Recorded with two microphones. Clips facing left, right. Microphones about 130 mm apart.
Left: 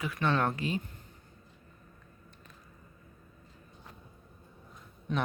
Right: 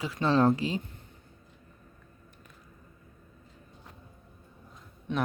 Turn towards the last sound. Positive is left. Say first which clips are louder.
# right 2 dB
turn(degrees=0)  # may be behind; listen again after turning